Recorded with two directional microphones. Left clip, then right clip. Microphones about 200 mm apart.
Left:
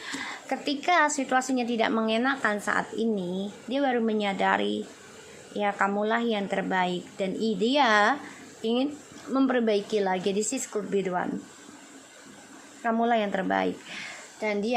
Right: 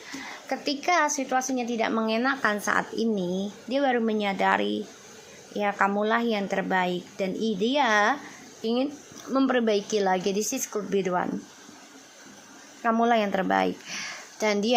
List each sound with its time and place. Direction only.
0.2 s speech: centre (ahead or behind)
12.8 s a woman's voice: 10° right (ahead or behind)
14.0 s a sound: 15° right (ahead or behind)